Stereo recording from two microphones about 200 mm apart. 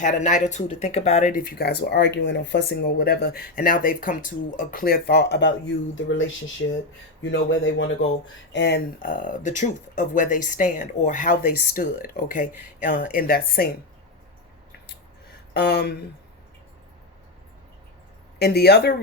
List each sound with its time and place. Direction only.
0.0 s speech: 40° left (ahead or behind); by 7.9 s 70° left (ahead or behind)
8.5 s speech: 55° left (ahead or behind)
15.6 s speech: 55° left (ahead or behind)
18.3 s speech: 55° left (ahead or behind)